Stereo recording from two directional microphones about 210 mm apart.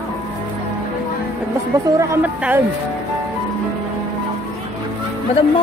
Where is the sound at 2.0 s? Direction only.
10° right (ahead or behind).